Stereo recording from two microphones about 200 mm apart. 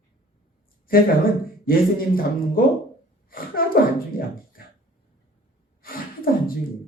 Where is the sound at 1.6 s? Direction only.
45° left (ahead or behind).